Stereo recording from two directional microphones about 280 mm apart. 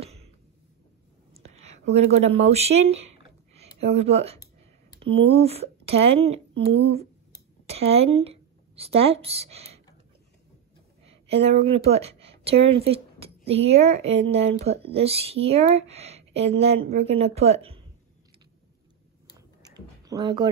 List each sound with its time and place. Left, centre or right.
1.9 s speech: right
11.1 s speech: right
19.3 s a sound: centre